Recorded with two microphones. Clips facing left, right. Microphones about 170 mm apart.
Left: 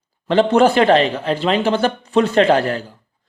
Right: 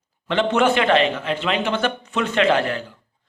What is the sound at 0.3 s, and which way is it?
A man's voice, 35° left (ahead or behind).